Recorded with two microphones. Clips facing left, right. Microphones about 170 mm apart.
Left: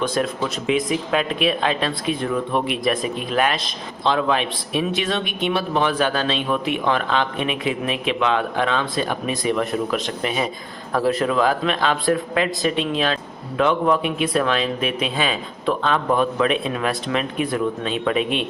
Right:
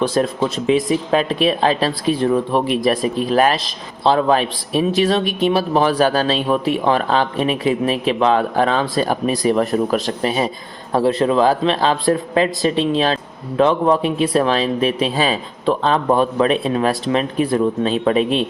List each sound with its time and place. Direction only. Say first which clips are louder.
0.0 s speech: right 5 dB; 30° right (ahead or behind)